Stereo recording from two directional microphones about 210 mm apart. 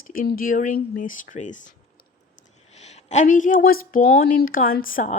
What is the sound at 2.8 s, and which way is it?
Speech, 35° left (ahead or behind).